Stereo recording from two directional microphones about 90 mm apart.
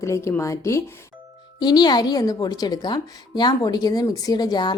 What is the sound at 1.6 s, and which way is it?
A woman's voice, 50° left (ahead or behind).